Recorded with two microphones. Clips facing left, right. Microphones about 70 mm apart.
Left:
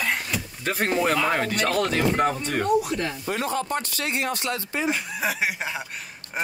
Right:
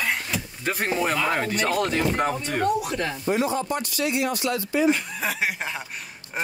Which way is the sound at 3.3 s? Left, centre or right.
Left.